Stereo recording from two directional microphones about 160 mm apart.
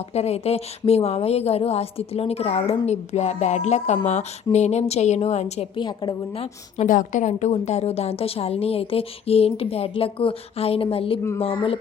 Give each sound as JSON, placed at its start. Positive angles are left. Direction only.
{"t": 0.1, "sound": "a woman's voice", "side_deg": 40}
{"t": 6.8, "sound": "a woman's voice", "side_deg": 55}